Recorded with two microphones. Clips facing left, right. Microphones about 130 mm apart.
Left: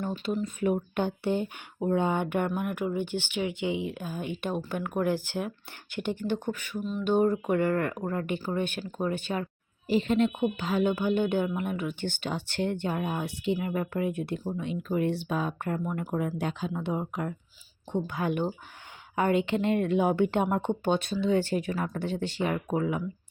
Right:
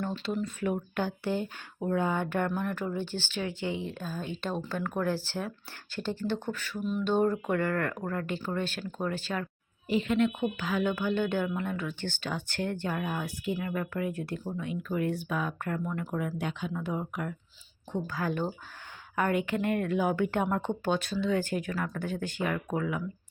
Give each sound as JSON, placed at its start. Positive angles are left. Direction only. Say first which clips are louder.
{"t": 0.0, "sound": "speech", "louder": "left 2 dB", "side_deg": 10}
{"t": 0.6, "sound": "speech", "louder": "left 5 dB", "side_deg": 20}
{"t": 6.7, "sound": "a sound", "louder": "right 2 dB", "side_deg": -5}
{"t": 7.0, "sound": "speech", "louder": "left 3 dB", "side_deg": 10}
{"t": 9.9, "sound": "speech", "louder": "left 2 dB", "side_deg": 30}
{"t": 10.2, "sound": "speech", "louder": "left 2 dB", "side_deg": 20}
{"t": 16.4, "sound": "speech", "louder": "left 2 dB", "side_deg": 35}